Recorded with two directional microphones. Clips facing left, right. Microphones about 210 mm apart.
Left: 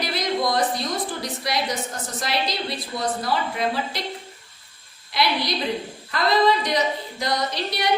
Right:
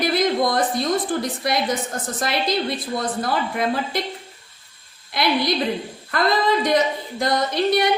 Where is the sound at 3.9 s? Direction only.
50° right (ahead or behind).